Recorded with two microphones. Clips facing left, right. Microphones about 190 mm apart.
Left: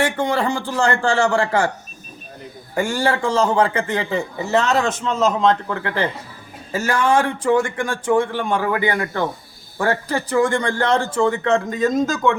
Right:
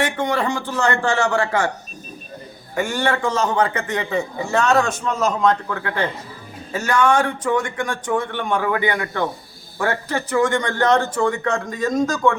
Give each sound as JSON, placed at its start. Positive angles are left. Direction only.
{"t": 0.0, "sound": "a man's voice", "side_deg": 35}
{"t": 2.7, "sound": "a man's voice", "side_deg": 35}